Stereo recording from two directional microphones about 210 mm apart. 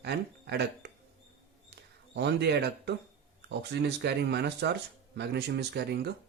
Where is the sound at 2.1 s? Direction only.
55° right (ahead or behind).